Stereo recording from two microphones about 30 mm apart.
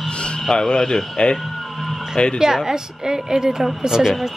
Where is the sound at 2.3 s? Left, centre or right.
Centre.